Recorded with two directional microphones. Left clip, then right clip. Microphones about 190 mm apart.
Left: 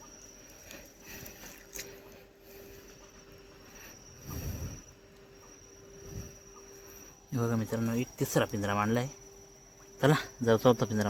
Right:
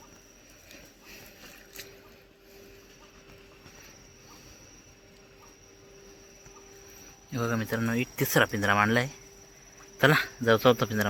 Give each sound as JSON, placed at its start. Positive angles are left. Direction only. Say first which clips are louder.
{"t": 7.3, "sound": "speech", "louder": "right 3 dB", "side_deg": 10}
{"t": 10.0, "sound": "speech", "louder": "right 5 dB", "side_deg": 15}